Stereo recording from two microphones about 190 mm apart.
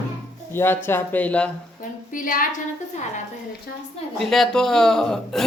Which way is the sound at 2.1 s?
45° left (ahead or behind).